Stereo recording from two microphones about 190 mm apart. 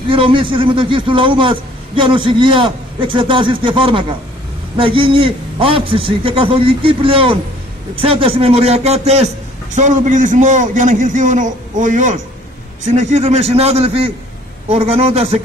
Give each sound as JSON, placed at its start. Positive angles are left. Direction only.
{"t": 0.1, "sound": "a man's voice", "side_deg": -25}